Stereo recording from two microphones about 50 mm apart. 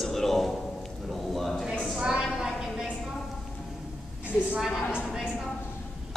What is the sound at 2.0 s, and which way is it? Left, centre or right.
Speech, centre.